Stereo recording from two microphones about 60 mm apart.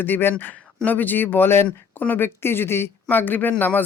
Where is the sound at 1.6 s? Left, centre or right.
Left.